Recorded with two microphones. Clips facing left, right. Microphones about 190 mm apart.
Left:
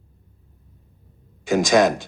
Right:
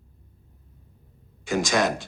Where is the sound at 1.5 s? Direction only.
20° left (ahead or behind).